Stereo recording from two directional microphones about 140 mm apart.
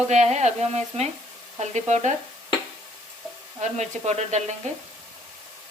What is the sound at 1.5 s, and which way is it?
Sizzle, 55° right (ahead or behind).